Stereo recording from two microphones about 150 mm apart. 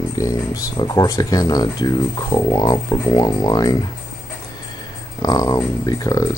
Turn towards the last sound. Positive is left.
turn(degrees=20)  # may be behind; listen again after turning